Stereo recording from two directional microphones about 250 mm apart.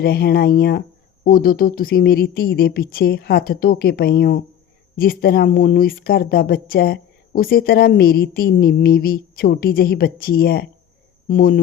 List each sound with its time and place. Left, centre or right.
0.0 s speech: left